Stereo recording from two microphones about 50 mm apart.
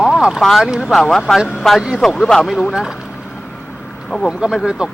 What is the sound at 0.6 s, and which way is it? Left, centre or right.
Speech, centre.